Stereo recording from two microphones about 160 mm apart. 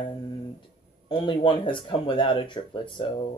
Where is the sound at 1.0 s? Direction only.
30° left (ahead or behind).